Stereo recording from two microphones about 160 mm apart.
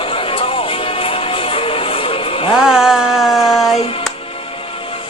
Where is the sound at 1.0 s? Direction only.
35° left (ahead or behind).